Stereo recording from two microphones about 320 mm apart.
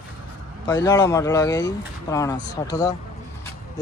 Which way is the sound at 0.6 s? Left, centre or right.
Centre.